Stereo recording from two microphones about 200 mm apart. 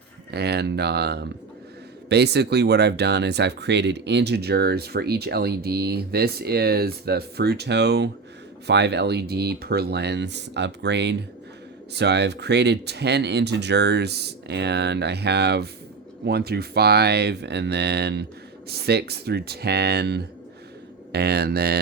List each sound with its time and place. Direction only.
0.3 s speech: 55° right (ahead or behind)